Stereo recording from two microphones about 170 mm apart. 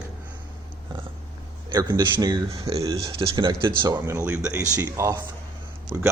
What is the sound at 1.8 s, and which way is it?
Speech, 20° right (ahead or behind).